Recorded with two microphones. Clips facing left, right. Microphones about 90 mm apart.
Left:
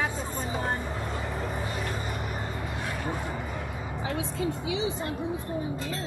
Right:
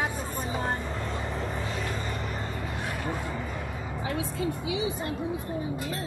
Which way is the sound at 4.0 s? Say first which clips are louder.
Even; 25° left (ahead or behind).